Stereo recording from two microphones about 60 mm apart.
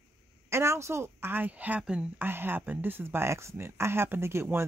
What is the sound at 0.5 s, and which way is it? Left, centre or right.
Speech, right.